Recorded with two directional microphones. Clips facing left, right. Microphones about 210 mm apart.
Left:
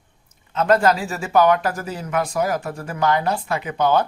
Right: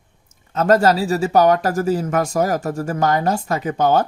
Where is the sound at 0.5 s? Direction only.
40° right (ahead or behind).